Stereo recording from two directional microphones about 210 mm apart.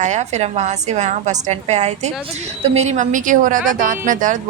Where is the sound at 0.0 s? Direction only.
35° right (ahead or behind).